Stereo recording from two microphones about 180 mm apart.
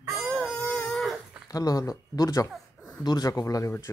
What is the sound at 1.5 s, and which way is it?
Speech, 20° left (ahead or behind).